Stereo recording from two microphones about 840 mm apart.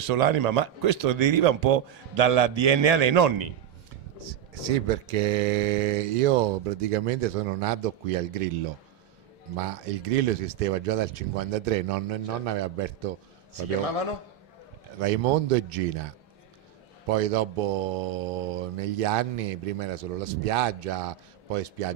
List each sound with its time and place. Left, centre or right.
0.0 s a man's voice: right
4.2 s speech: right
9.6 s speech: right
15.0 s speech: right
17.1 s speech: right